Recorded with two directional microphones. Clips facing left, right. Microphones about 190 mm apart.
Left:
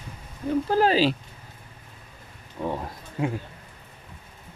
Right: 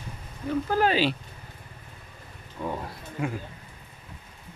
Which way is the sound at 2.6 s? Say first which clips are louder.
Left 3 dB; 15° left (ahead or behind).